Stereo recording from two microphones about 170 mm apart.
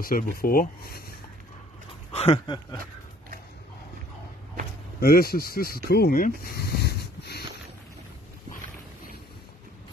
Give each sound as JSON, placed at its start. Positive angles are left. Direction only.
{"t": 0.0, "sound": "speech", "side_deg": 60}
{"t": 2.1, "sound": "speech", "side_deg": 35}
{"t": 5.0, "sound": "speech", "side_deg": 65}
{"t": 5.9, "sound": "a sound", "side_deg": 65}